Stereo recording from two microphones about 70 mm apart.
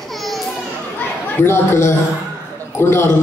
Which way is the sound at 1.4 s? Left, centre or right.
Left.